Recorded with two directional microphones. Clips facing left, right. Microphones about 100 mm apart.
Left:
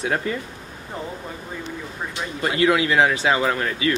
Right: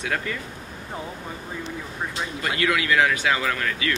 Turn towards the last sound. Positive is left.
turn(degrees=25)  # may be behind; listen again after turning